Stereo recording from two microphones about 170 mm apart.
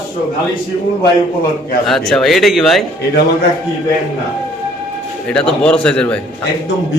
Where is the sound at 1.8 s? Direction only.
Centre (ahead or behind).